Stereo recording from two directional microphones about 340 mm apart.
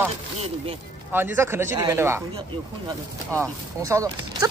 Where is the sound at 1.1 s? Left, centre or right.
Centre.